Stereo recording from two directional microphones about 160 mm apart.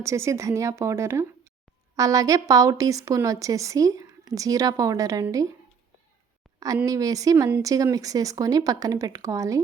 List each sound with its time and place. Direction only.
0.0 s a woman's voice: 20° right (ahead or behind)
6.8 s a woman's voice: 20° right (ahead or behind)